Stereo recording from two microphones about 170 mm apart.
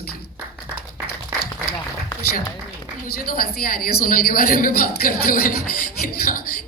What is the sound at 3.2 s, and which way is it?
A woman's voice, 60° left (ahead or behind).